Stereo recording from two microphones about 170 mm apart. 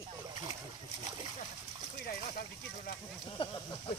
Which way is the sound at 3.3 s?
30° left (ahead or behind).